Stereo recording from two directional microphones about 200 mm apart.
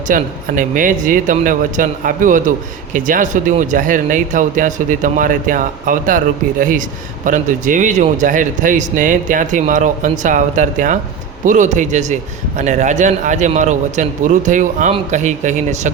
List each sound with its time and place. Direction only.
0.1 s speech: 40° right (ahead or behind)